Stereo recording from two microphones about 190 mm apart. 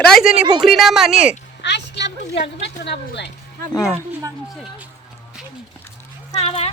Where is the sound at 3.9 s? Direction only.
15° right (ahead or behind).